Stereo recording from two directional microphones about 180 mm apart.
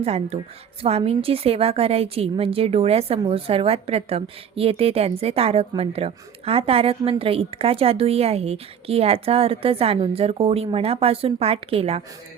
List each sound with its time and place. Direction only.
0.0 s a woman's voice: 35° right (ahead or behind)